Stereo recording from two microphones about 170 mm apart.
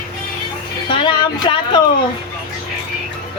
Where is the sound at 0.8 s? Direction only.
30° left (ahead or behind).